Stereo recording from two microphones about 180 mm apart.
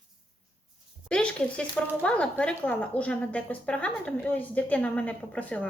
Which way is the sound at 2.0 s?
5° left (ahead or behind).